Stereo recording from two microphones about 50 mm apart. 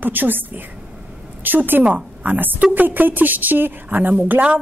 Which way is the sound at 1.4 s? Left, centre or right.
Right.